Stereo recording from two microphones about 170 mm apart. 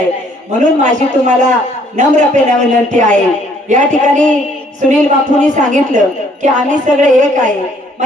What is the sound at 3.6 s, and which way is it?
Speech, 45° right (ahead or behind).